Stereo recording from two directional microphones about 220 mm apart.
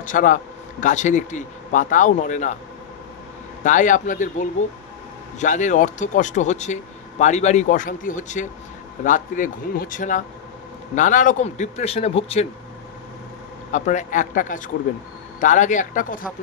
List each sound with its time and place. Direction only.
0.0 s speech: 35° left (ahead or behind)
3.6 s a man's voice: 35° left (ahead or behind)
13.7 s speech: 35° left (ahead or behind)